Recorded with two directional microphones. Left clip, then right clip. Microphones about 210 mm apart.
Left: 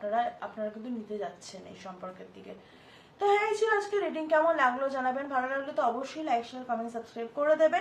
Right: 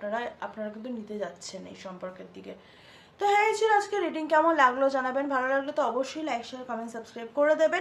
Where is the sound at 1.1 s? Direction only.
50° right (ahead or behind).